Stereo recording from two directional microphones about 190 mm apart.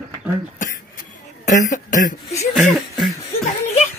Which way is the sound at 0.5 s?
40° left (ahead or behind).